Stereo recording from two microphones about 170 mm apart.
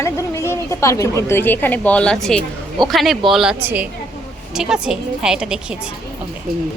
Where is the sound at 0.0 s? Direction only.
15° left (ahead or behind); by 5.7 s 5° right (ahead or behind).